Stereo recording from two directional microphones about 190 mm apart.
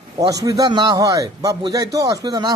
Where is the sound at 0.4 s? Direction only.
20° right (ahead or behind).